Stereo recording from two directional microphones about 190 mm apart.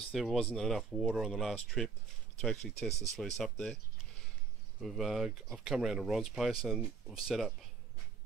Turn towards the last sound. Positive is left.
turn(degrees=-5)  # may be behind; listen again after turning